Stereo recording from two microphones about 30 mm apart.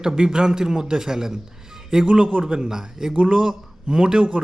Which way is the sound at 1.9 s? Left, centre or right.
Right.